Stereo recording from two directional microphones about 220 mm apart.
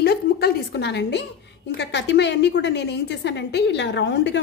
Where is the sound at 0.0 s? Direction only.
45° left (ahead or behind).